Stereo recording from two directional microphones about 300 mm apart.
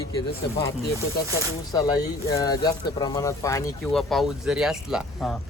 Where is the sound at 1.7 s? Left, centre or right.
Centre.